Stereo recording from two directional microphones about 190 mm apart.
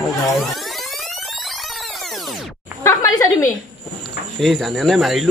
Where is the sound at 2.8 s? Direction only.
15° left (ahead or behind).